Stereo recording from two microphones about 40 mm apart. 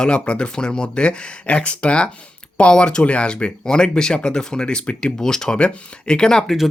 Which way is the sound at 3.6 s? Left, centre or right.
Centre.